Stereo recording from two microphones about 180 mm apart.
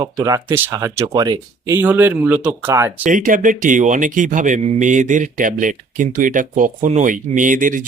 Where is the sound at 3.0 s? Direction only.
50° right (ahead or behind).